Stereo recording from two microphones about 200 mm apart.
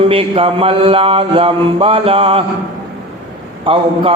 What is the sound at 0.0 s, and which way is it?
A man's voice, 30° right (ahead or behind).